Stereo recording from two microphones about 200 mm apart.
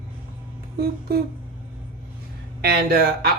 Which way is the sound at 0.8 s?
50° right (ahead or behind).